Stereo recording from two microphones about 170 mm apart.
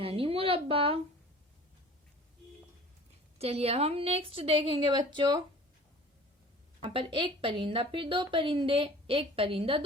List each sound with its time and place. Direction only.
0.0 s a woman's voice: 35° right (ahead or behind)
3.3 s a woman's voice: 35° right (ahead or behind)
6.8 s a woman's voice: 30° right (ahead or behind)